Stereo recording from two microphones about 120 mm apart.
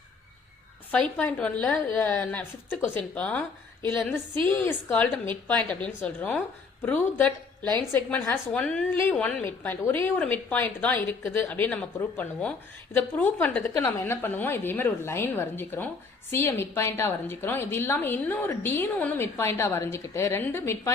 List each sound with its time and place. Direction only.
0.9 s a woman's voice: 10° left (ahead or behind)
9.4 s a woman's voice: 20° left (ahead or behind)